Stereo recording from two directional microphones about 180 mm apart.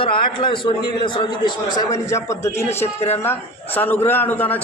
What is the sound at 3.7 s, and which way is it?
Speech, 10° left (ahead or behind).